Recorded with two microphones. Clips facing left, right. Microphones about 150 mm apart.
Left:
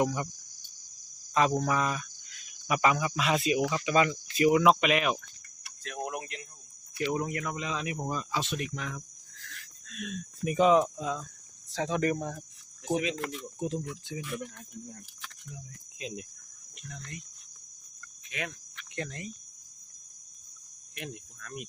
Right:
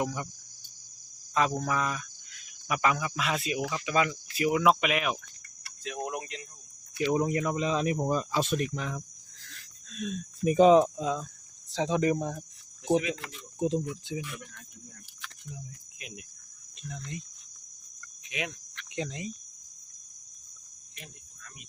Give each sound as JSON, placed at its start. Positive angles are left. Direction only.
{"t": 0.0, "sound": "speech", "side_deg": 0}
{"t": 1.3, "sound": "cricket", "side_deg": 0}
{"t": 1.6, "sound": "speech", "side_deg": 5}
{"t": 7.0, "sound": "speech", "side_deg": -20}
{"t": 10.0, "sound": "speech", "side_deg": -30}
{"t": 10.9, "sound": "speech", "side_deg": -20}
{"t": 13.6, "sound": "speech", "side_deg": -20}
{"t": 16.0, "sound": "speech", "side_deg": 25}
{"t": 16.9, "sound": "speech", "side_deg": -20}
{"t": 18.3, "sound": "cricket", "side_deg": -20}
{"t": 18.9, "sound": "speech", "side_deg": -15}
{"t": 20.9, "sound": "cricket", "side_deg": 65}